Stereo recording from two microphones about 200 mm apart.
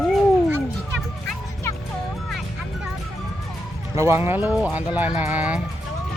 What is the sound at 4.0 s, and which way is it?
Speech, 10° right (ahead or behind).